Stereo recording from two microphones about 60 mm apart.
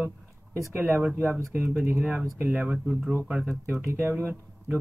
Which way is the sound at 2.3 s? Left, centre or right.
Right.